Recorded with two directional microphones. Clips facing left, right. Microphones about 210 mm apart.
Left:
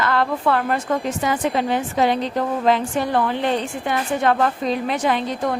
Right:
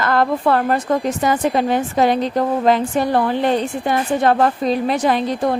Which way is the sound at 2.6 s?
40° right (ahead or behind).